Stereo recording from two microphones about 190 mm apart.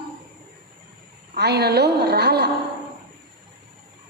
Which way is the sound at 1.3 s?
60° right (ahead or behind).